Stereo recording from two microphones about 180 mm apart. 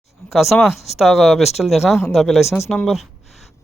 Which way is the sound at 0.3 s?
Centre (ahead or behind).